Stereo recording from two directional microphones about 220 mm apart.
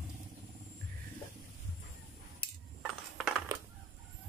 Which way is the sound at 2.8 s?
Centre (ahead or behind).